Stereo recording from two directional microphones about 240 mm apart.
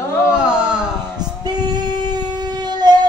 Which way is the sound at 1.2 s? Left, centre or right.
Centre.